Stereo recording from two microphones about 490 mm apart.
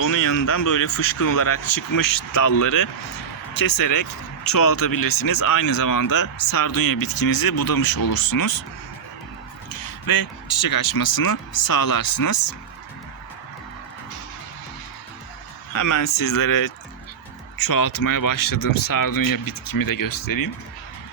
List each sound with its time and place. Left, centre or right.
0.0 s speech: left
9.7 s speech: left
15.7 s speech: left